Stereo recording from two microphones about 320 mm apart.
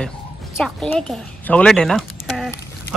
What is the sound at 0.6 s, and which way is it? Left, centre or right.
Speech, centre.